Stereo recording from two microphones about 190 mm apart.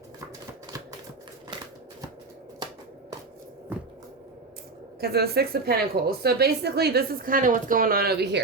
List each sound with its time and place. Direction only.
4.9 s a woman's voice: 55° right (ahead or behind)